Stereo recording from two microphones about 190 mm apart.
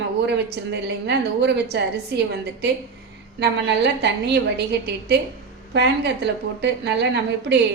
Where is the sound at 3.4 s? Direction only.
60° right (ahead or behind).